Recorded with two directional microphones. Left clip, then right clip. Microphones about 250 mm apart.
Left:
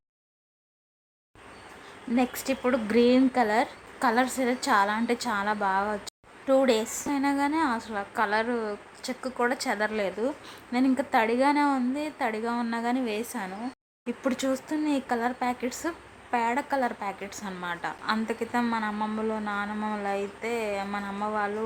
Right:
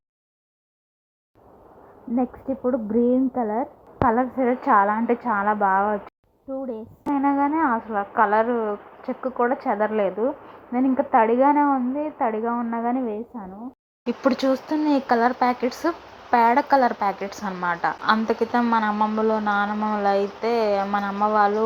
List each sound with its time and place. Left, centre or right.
2.6 s a woman's voice: centre
14.4 s a woman's voice: centre